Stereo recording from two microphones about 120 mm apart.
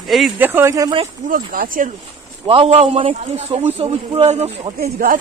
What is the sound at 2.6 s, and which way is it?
A man's voice, 60° right (ahead or behind).